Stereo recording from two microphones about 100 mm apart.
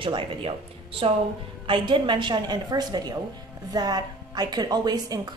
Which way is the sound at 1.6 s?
55° right (ahead or behind).